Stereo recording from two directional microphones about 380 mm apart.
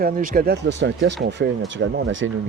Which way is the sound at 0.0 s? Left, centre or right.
Right.